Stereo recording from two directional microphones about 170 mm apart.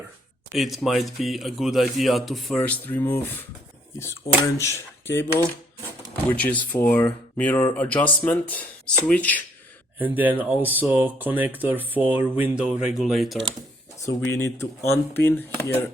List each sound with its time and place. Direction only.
0.5 s speech: centre (ahead or behind)
4.5 s speech: 15° left (ahead or behind)
10.0 s speech: 10° right (ahead or behind)
14.0 s speech: 15° left (ahead or behind)